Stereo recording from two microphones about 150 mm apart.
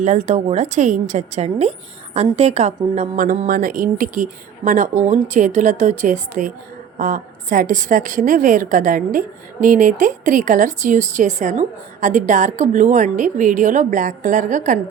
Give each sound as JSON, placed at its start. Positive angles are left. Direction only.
{"t": 0.0, "sound": "a woman's voice", "side_deg": -50}